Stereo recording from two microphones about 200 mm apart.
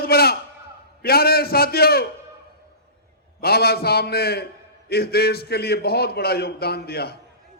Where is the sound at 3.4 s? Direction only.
50° left (ahead or behind).